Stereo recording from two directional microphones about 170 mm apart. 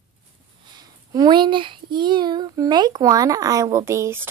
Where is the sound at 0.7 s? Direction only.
25° right (ahead or behind).